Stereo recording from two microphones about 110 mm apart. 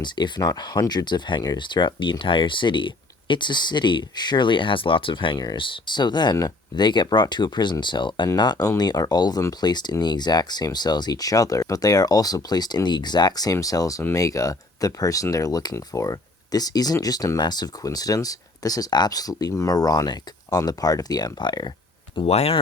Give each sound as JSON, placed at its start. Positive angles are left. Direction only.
{"t": 0.0, "sound": "speech", "side_deg": 40}
{"t": 22.3, "sound": "speech", "side_deg": 70}